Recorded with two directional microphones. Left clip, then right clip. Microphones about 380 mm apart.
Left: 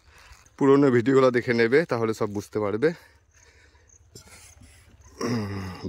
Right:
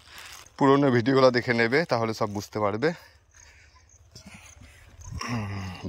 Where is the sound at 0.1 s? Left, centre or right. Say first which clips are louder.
Right 8 dB; right.